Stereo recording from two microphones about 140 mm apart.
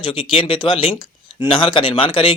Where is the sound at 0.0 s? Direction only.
40° left (ahead or behind).